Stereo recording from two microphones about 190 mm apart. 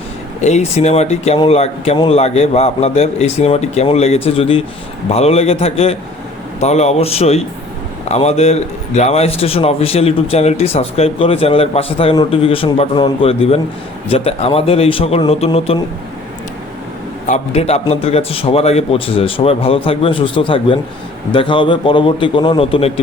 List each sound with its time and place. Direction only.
0.4 s a man's voice: 35° left (ahead or behind)
17.2 s a man's voice: 35° left (ahead or behind)